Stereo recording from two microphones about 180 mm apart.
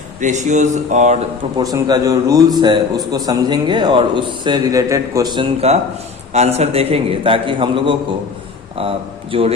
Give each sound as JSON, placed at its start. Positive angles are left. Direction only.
{"t": 0.2, "sound": "a man's voice", "side_deg": -45}
{"t": 1.5, "sound": "a man's voice", "side_deg": -20}
{"t": 9.3, "sound": "a man's voice", "side_deg": -30}